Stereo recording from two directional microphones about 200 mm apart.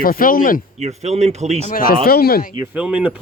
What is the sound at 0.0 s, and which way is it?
Speech, 45° left (ahead or behind).